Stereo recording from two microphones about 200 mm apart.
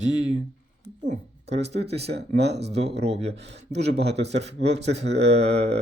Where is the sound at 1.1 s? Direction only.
30° right (ahead or behind).